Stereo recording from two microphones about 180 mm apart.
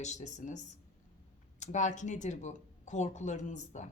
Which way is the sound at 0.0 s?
40° left (ahead or behind).